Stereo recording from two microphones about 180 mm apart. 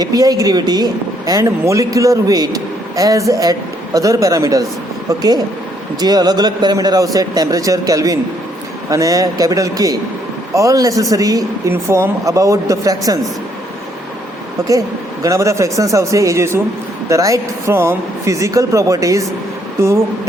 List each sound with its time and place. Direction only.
0.0 s a man's voice: 20° right (ahead or behind)
6.0 s a man's voice: 20° right (ahead or behind)
14.7 s speech: 20° right (ahead or behind)